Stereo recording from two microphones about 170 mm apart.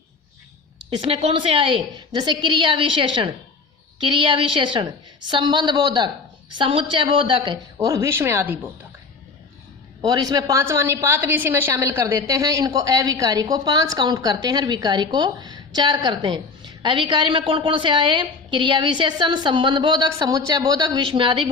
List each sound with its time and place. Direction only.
0.9 s a woman's voice: 30° right (ahead or behind); by 8.7 s 10° right (ahead or behind)
10.0 s a woman's voice: 25° right (ahead or behind)